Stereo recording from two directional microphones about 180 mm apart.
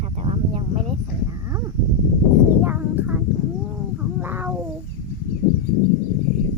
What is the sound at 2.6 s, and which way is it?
Speech, 10° right (ahead or behind).